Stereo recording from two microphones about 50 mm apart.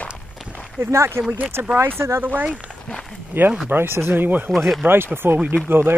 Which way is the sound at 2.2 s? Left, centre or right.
Right.